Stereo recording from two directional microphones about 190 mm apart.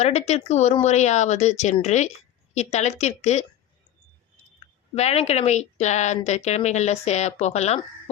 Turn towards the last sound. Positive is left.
turn(degrees=35)  # may be behind; listen again after turning